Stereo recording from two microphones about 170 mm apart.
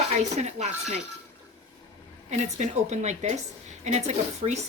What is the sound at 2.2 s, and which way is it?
A woman's voice, 45° right (ahead or behind).